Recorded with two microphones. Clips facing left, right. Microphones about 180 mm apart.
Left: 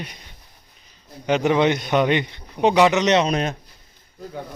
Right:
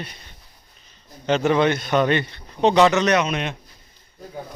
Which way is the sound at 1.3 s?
15° left (ahead or behind).